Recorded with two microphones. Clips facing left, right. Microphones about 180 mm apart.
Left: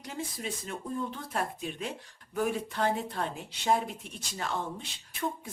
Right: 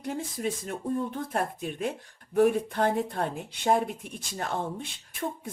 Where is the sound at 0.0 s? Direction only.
50° right (ahead or behind).